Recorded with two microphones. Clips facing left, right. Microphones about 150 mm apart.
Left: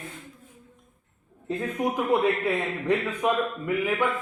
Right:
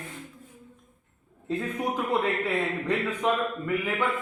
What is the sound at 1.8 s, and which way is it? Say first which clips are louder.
Speech: left 5 dB; 15° left (ahead or behind).